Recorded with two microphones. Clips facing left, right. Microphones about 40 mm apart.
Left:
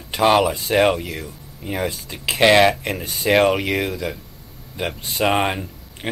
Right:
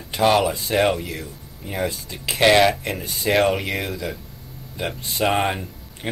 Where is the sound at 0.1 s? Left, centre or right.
Centre.